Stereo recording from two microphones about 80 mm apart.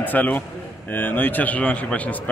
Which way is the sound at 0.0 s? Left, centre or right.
Left.